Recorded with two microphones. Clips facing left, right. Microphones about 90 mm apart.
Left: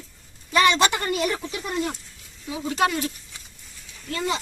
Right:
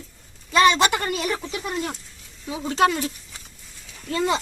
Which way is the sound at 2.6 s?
20° right (ahead or behind).